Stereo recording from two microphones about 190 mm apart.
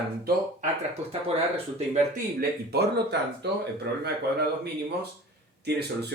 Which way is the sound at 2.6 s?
60° right (ahead or behind).